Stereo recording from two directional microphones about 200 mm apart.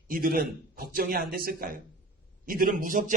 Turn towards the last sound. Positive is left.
turn(degrees=-40)  # may be behind; listen again after turning